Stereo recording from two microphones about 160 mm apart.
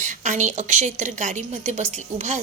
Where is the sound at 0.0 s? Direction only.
50° right (ahead or behind).